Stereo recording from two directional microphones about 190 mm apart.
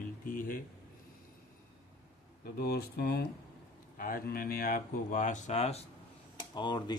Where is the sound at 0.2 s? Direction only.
45° left (ahead or behind).